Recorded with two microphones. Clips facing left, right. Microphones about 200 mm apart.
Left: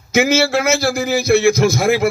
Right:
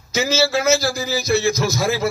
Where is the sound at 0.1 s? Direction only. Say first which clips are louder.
Left 4 dB; 55° left (ahead or behind).